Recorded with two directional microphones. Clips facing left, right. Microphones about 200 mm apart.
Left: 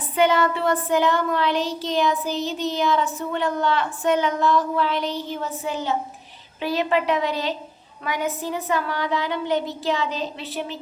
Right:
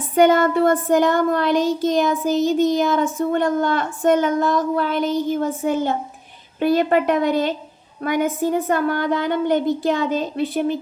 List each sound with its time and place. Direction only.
0.1 s child singing: 50° right (ahead or behind)